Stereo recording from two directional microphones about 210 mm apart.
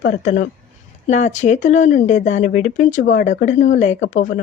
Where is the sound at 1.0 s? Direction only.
35° left (ahead or behind).